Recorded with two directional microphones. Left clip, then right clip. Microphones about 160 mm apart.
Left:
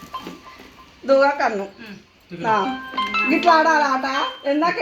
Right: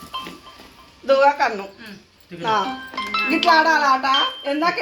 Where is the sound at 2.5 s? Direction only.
30° left (ahead or behind).